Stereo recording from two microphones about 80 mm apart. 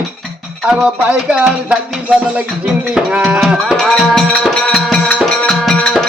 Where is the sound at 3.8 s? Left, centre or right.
Centre.